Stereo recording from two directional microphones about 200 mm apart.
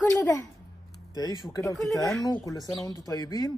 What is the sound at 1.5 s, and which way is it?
Speech, 15° left (ahead or behind).